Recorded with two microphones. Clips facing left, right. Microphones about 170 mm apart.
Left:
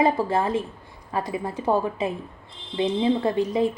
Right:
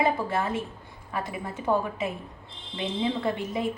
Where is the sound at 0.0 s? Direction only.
30° left (ahead or behind).